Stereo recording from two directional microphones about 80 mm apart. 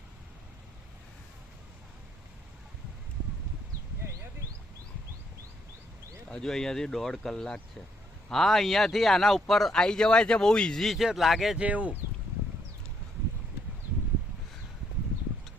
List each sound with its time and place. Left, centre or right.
4.0 s a sound: right
6.2 s speech: centre
11.5 s speech: centre